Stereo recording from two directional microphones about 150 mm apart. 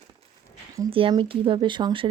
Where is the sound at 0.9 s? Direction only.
35° right (ahead or behind).